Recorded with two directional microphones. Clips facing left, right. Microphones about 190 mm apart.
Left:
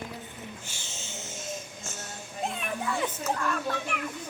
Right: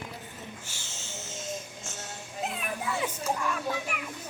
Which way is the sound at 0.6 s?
15° left (ahead or behind).